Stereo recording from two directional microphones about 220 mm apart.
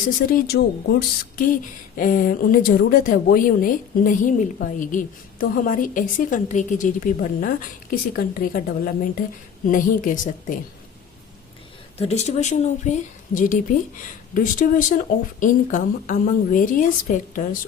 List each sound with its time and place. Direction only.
0.3 s a woman's voice: 45° left (ahead or behind)
11.9 s a woman's voice: 30° left (ahead or behind)